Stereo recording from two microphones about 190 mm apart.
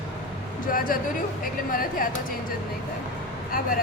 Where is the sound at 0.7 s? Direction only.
45° left (ahead or behind).